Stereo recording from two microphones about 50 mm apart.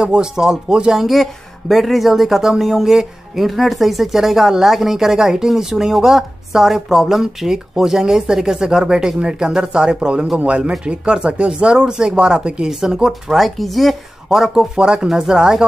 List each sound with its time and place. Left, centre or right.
0.0 s speech: centre
1.0 s speech: centre
13.4 s speech: centre
14.4 s speech: centre